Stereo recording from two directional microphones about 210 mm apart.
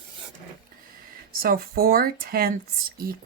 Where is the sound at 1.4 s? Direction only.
45° right (ahead or behind).